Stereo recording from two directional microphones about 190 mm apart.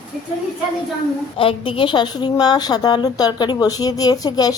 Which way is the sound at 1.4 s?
30° left (ahead or behind).